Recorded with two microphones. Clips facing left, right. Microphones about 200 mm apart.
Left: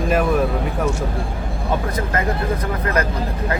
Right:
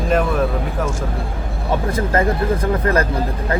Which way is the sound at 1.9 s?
30° right (ahead or behind).